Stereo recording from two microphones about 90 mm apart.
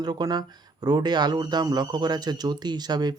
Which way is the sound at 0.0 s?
50° right (ahead or behind).